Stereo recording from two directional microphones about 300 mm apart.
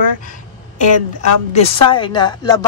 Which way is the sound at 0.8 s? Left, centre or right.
Left.